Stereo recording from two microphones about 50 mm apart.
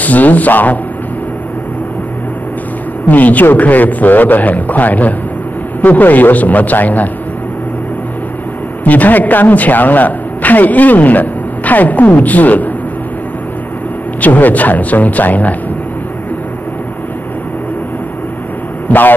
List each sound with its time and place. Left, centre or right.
0.0 s a man's voice: left
3.1 s a man's voice: left
8.8 s a man's voice: left
14.2 s a man's voice: left
18.9 s speech: left